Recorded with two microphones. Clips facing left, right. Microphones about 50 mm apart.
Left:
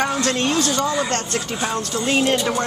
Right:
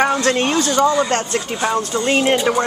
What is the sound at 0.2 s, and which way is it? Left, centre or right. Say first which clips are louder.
Speech: right 3 dB; right.